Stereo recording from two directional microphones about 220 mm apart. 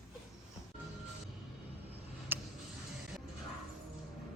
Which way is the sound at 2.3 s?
10° right (ahead or behind).